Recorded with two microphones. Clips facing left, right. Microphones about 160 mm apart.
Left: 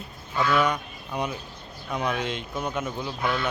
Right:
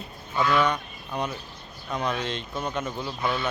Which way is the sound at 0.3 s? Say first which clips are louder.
Even; centre (ahead or behind).